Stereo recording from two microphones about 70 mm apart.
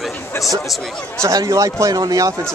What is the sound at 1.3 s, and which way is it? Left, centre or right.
A man's voice, right.